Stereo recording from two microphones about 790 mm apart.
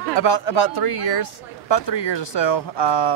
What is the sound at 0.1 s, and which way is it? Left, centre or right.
Speech, left.